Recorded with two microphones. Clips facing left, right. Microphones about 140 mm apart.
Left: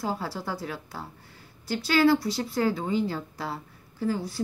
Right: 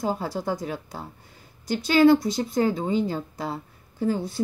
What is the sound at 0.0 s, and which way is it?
Speech, 20° right (ahead or behind).